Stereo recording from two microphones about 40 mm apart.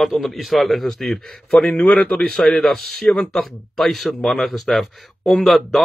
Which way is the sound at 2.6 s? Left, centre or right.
Centre.